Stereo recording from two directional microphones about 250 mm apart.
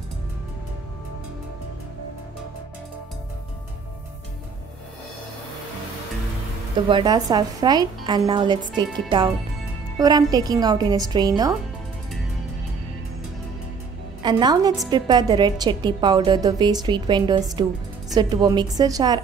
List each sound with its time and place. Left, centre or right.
6.9 s a woman's voice: centre
9.9 s a woman's voice: centre
14.2 s a woman's voice: centre